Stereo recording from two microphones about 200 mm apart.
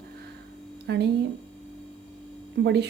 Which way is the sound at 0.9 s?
60° right (ahead or behind).